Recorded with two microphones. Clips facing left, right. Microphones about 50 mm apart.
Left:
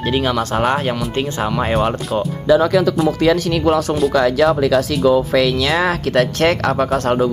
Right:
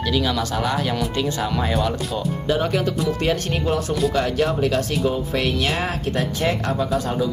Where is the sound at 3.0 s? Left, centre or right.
Left.